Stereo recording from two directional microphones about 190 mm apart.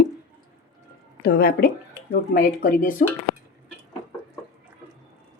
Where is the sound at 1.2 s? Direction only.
55° left (ahead or behind).